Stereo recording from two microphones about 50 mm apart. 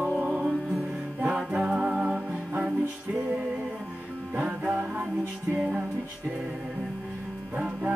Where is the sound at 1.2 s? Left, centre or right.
Right.